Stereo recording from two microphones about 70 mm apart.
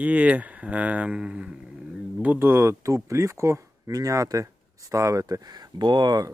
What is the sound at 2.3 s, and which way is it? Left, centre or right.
Speech, right.